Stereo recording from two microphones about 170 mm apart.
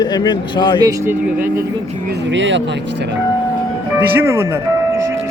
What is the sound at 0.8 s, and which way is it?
Speech, 15° right (ahead or behind).